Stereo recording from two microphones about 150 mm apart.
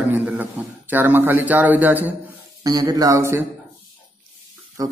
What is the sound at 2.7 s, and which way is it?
Speech, 25° right (ahead or behind).